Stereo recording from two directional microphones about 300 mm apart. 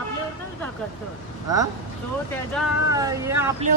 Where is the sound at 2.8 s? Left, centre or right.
Centre.